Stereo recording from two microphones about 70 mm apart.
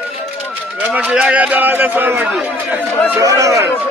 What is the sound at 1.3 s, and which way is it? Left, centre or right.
Speech, right.